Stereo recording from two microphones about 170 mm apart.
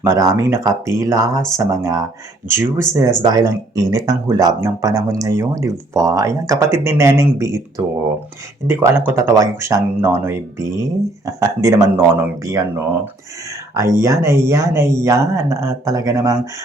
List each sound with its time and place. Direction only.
0.0 s speech: 20° right (ahead or behind)